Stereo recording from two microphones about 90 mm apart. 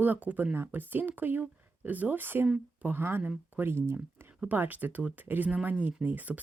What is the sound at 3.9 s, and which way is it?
Speech, 15° right (ahead or behind).